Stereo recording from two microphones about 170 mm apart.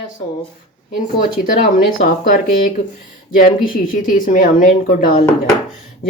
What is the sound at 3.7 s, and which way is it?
Speech, 55° left (ahead or behind).